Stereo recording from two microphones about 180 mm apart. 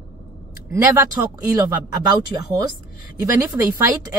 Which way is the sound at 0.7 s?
15° right (ahead or behind).